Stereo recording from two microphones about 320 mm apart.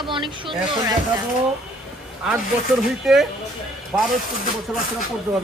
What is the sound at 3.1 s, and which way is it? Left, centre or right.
Speech, centre.